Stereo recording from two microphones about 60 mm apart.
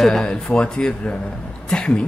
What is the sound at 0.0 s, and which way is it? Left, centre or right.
A man's voice, centre.